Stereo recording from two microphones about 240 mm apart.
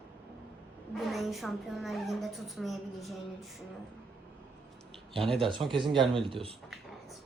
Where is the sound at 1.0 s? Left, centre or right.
Centre.